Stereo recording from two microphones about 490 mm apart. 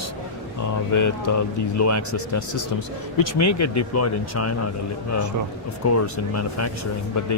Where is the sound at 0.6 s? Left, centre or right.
Left.